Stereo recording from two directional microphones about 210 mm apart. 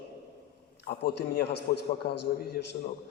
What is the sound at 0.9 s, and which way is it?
A man's voice, 50° left (ahead or behind).